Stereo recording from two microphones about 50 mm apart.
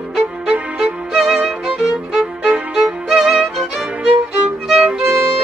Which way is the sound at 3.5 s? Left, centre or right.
Centre.